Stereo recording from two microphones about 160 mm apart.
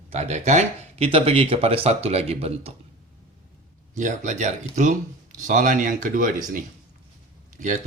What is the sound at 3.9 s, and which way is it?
Speech, 50° right (ahead or behind).